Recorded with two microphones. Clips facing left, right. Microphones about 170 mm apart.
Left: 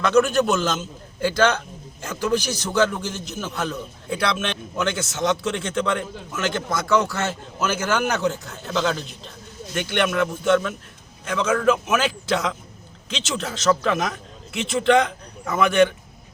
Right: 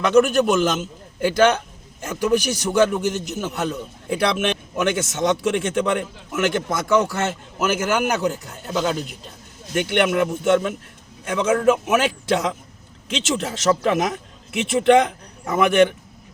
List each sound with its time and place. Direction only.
0.0 s a man's voice: 10° right (ahead or behind)
13.3 s a man's voice: 20° right (ahead or behind)